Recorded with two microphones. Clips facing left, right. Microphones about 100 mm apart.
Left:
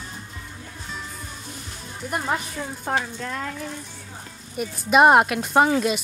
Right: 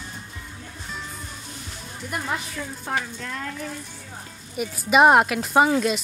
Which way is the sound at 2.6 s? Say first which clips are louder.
Left 2 dB; 35° left (ahead or behind).